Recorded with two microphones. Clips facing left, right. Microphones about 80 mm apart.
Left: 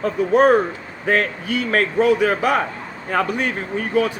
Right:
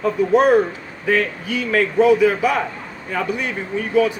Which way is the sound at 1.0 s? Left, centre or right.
Left.